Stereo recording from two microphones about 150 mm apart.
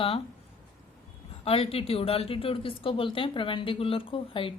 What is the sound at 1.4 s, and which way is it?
Speech, 40° left (ahead or behind).